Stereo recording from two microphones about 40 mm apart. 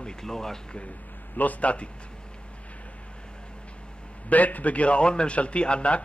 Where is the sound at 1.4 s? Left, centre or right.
Left.